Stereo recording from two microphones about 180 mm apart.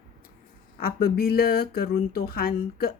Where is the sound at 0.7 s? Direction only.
55° left (ahead or behind).